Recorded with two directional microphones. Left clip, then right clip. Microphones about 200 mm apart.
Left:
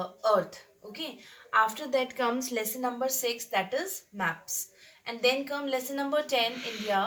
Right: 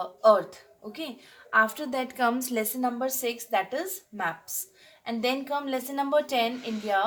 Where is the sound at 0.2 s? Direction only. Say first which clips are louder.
Right 6 dB; 45° right (ahead or behind).